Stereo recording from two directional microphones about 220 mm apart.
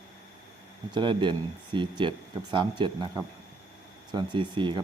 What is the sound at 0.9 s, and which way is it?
Speech, 20° right (ahead or behind).